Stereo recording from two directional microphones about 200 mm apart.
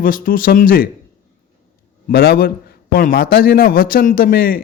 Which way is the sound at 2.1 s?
50° left (ahead or behind).